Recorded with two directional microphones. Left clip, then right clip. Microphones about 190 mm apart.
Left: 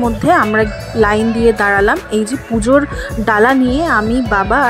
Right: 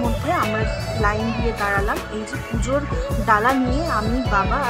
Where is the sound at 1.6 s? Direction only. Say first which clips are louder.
Left 6 dB; 35° left (ahead or behind).